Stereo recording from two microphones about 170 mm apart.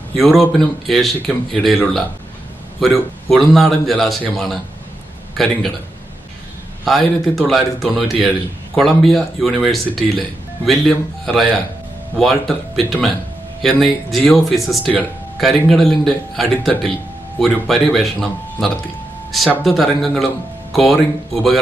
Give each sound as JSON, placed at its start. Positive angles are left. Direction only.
{"t": 0.1, "sound": "speech", "side_deg": 0}
{"t": 6.8, "sound": "speech", "side_deg": 0}